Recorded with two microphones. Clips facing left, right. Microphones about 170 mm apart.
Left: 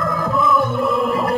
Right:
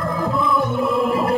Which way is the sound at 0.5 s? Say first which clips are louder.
Left 2 dB; 15° right (ahead or behind).